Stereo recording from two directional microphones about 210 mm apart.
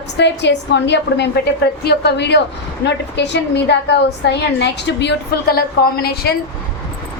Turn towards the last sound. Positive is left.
turn(degrees=50)  # may be behind; listen again after turning